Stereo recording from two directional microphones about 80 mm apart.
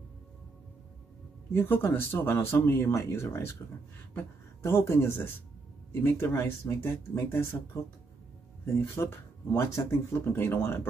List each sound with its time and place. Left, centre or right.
1.5 s speech: left
8.9 s speech: left